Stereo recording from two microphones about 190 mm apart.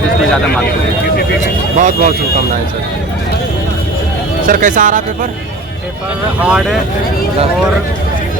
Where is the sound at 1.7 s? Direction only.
45° right (ahead or behind).